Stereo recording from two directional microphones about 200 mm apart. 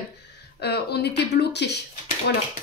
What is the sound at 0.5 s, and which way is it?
Speech, 55° left (ahead or behind).